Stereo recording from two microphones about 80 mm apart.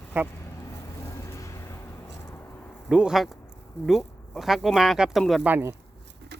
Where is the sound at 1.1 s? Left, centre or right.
Left.